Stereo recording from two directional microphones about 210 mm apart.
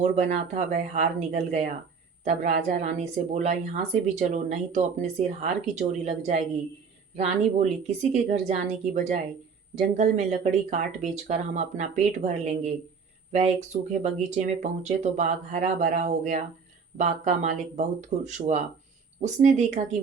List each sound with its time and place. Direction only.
0.0 s speech: 35° right (ahead or behind)